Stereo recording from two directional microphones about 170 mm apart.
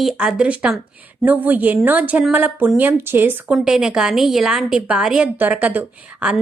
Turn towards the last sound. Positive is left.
turn(degrees=-10)  # may be behind; listen again after turning